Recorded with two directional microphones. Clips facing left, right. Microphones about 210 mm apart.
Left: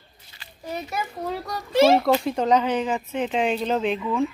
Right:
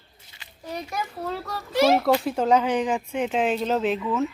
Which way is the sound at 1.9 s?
5° right (ahead or behind).